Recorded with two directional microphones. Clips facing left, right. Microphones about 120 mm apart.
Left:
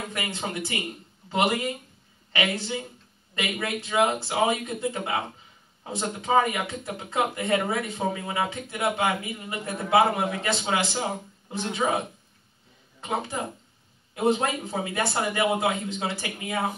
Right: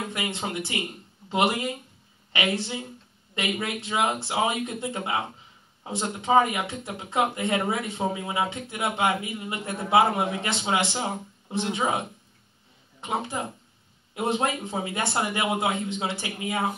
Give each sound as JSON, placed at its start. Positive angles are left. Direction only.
{"t": 0.1, "sound": "speech", "side_deg": -20}
{"t": 14.1, "sound": "speech", "side_deg": -20}